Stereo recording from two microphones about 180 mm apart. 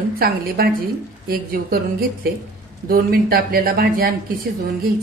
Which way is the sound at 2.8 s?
55° right (ahead or behind).